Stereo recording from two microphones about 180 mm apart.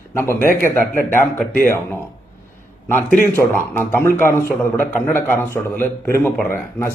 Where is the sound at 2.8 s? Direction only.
15° left (ahead or behind).